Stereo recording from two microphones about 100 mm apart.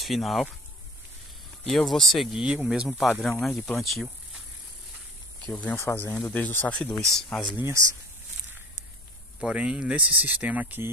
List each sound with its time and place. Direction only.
0.0 s speech: centre (ahead or behind)
1.7 s speech: centre (ahead or behind)
5.4 s speech: 15° left (ahead or behind)
5.8 s speech: 25° left (ahead or behind)
7.1 s speech: 5° left (ahead or behind)
7.5 s speech: 30° right (ahead or behind)
9.4 s speech: 10° right (ahead or behind)